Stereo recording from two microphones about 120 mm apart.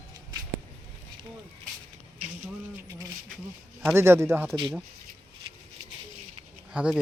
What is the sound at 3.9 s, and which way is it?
Speech, 20° right (ahead or behind).